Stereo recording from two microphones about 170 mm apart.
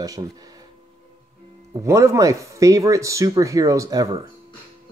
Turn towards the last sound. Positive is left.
turn(degrees=-20)  # may be behind; listen again after turning